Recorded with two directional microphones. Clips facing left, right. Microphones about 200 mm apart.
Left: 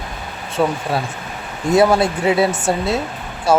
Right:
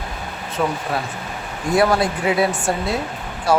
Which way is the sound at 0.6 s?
30° left (ahead or behind).